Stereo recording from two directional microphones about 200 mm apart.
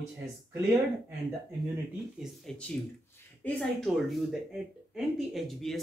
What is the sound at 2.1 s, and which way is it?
Speech, centre (ahead or behind).